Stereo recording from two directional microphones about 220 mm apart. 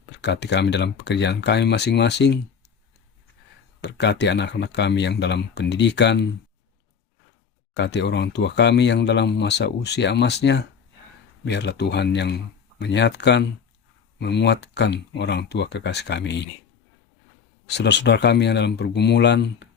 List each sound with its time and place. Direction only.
0.2 s speech: 50° left (ahead or behind)
3.8 s speech: 50° left (ahead or behind)
7.7 s speech: 50° left (ahead or behind)
17.7 s speech: 50° left (ahead or behind)